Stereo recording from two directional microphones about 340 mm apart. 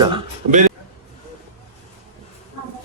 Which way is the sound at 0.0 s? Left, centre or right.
Centre.